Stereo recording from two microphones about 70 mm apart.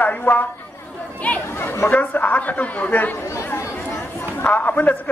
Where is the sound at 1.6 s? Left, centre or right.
Left.